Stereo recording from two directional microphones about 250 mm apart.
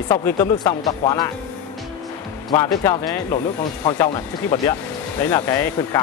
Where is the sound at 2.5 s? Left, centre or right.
Centre.